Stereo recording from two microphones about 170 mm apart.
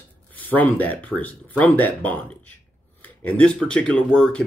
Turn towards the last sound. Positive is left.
turn(degrees=5)  # may be behind; listen again after turning